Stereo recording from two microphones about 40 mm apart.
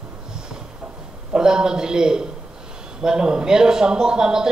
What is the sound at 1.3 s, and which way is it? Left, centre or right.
A woman's voice, centre.